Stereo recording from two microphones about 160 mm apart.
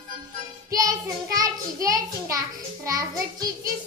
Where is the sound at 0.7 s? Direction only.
20° right (ahead or behind).